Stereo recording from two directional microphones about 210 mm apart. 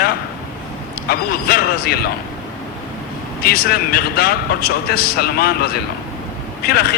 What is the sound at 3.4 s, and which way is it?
Speech, 45° left (ahead or behind).